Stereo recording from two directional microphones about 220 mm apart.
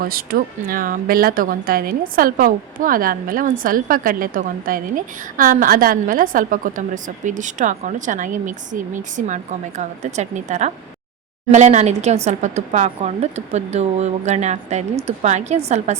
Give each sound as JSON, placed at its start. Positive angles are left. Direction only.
{"t": 0.0, "sound": "a woman's voice", "side_deg": -40}